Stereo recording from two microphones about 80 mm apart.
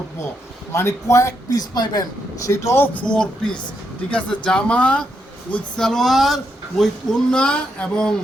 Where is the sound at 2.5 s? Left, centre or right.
Left.